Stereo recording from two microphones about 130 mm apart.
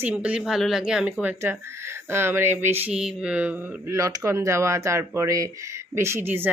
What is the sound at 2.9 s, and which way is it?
Speech, 5° right (ahead or behind).